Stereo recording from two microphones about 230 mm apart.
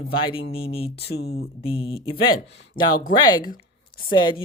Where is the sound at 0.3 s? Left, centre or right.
Left.